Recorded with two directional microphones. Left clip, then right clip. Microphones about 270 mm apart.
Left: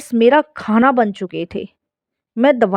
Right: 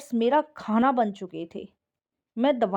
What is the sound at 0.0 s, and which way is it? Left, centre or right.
A woman's voice, left.